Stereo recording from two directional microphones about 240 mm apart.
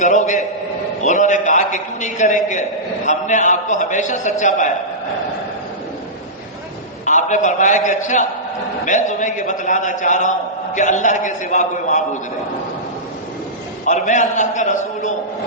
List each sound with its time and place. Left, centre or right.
0.0 s a man's voice: left
7.0 s a man's voice: left
13.8 s a man's voice: left